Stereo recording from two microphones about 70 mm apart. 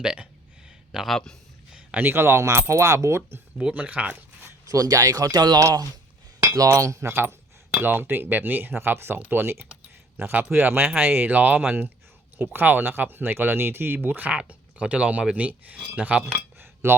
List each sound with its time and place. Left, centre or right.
0.0 s speech: centre
0.9 s speech: centre
2.0 s speech: right
3.6 s speech: centre
4.7 s speech: right
6.6 s cutlery: right
7.1 s speech: right
16.6 s cutlery: right